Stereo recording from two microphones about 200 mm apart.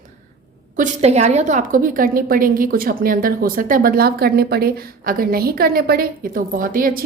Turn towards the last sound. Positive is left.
turn(degrees=-45)  # may be behind; listen again after turning